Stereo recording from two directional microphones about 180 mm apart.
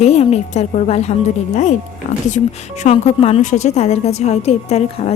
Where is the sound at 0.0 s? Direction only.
35° left (ahead or behind).